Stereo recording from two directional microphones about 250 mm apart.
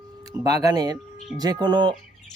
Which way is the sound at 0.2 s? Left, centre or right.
Centre.